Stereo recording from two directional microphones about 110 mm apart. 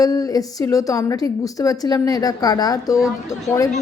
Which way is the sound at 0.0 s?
35° left (ahead or behind).